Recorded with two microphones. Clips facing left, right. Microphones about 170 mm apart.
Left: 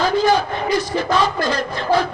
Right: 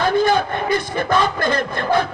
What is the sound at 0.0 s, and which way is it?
A man's voice, 55° right (ahead or behind).